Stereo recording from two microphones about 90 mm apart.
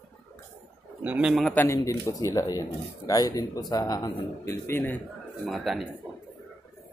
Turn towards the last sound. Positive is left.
turn(degrees=0)  # may be behind; listen again after turning